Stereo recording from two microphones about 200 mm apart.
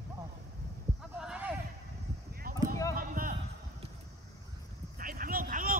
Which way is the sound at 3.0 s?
45° right (ahead or behind).